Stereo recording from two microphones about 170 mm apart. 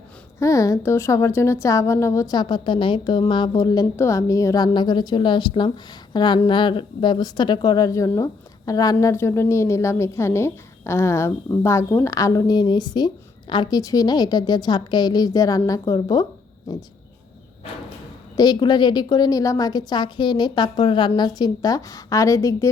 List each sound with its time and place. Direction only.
0.3 s speech: 20° left (ahead or behind)
18.3 s speech: 25° left (ahead or behind)